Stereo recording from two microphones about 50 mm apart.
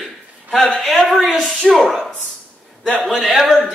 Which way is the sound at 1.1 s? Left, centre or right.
Centre.